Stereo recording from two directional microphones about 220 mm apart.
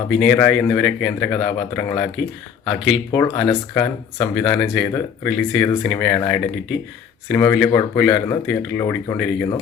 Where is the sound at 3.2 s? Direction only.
15° left (ahead or behind).